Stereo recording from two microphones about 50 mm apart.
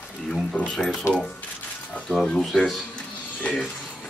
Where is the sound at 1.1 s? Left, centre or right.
Left.